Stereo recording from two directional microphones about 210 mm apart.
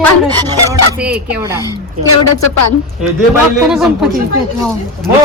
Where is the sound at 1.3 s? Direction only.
10° right (ahead or behind).